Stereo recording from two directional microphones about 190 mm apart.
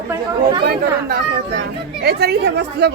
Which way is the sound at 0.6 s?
55° right (ahead or behind).